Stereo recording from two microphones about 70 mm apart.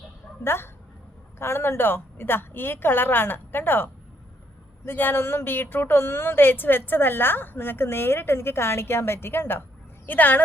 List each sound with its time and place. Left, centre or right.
0.4 s speech: left
4.9 s a woman's voice: left